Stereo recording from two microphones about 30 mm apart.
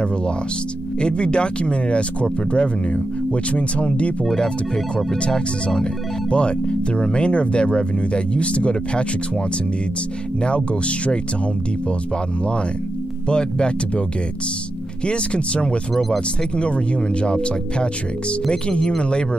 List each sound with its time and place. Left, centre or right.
1.0 s speech: left
10.4 s speech: left
13.3 s speech: left
15.0 s speech: left